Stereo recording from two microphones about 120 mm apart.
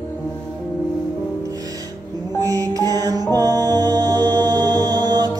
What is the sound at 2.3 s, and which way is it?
Music, 30° right (ahead or behind).